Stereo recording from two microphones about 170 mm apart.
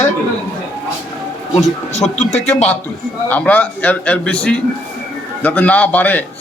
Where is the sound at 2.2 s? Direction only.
40° left (ahead or behind).